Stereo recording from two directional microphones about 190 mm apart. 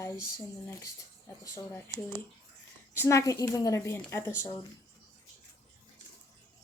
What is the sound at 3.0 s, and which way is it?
A woman's voice, 15° left (ahead or behind).